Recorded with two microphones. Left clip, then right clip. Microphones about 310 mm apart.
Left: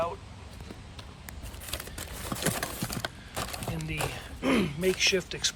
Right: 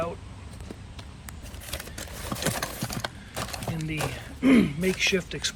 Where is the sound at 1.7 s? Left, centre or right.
Centre.